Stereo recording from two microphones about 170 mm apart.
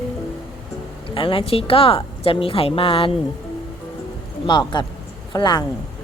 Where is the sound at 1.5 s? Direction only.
35° left (ahead or behind).